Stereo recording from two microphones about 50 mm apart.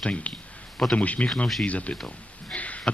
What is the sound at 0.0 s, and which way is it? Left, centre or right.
Speech, left.